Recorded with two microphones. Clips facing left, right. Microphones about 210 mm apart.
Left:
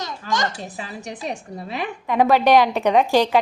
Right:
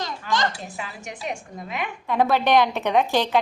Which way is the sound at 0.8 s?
35° left (ahead or behind).